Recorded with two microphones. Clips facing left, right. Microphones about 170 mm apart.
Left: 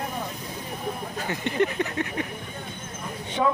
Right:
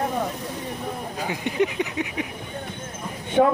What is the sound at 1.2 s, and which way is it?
Speech, 10° right (ahead or behind).